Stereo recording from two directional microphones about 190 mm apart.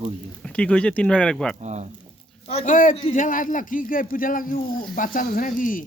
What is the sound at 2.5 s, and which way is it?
A man's voice, 35° left (ahead or behind).